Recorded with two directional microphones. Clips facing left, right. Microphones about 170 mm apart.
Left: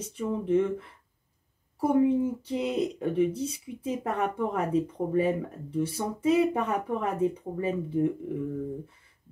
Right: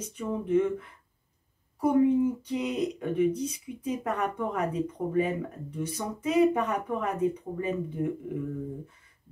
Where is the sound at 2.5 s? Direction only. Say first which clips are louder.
Left 1 dB; 30° left (ahead or behind).